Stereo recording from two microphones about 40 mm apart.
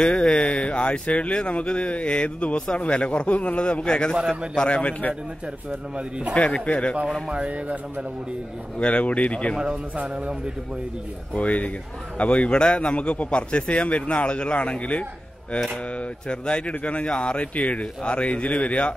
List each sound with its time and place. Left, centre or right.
0.0 s a man's voice: left
5.7 s speech: right
6.3 s a man's voice: left
7.3 s speech: right
8.7 s a man's voice: left
9.6 s speech: right
11.3 s a man's voice: left
16.3 s a man's voice: left